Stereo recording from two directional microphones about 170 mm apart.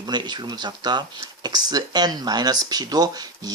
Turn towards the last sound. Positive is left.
turn(degrees=-20)  # may be behind; listen again after turning